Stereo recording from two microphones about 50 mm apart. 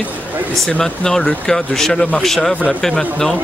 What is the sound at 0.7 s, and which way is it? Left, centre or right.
Speech, centre.